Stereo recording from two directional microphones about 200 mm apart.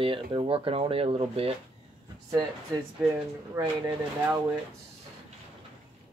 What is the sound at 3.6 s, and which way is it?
Speech, 15° right (ahead or behind).